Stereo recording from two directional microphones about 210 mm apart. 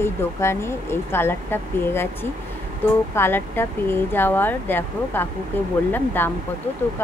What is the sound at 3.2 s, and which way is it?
Speech, 10° left (ahead or behind).